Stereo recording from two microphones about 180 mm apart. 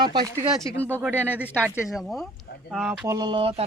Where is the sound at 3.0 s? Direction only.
20° right (ahead or behind).